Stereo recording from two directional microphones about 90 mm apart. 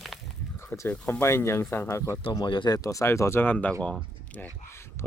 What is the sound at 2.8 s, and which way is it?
Speech, 35° left (ahead or behind).